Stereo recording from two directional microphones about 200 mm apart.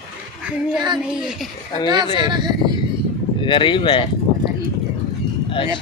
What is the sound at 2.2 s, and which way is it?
Speech, 20° right (ahead or behind).